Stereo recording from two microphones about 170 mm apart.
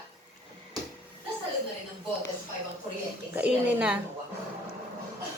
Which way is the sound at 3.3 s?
10° right (ahead or behind).